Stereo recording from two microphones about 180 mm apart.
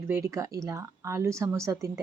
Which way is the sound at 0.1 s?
15° right (ahead or behind).